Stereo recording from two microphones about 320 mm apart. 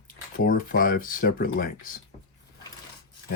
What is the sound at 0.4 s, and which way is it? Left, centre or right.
Speech, left.